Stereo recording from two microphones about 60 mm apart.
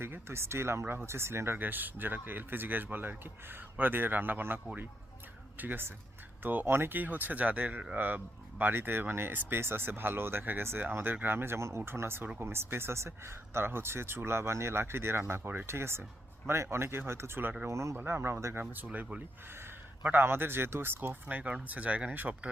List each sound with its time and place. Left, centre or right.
0.0 s speech: right
1.5 s speech: right
17.7 s speech: right
17.9 s speech: right
18.6 s a man's voice: right
21.2 s speech: right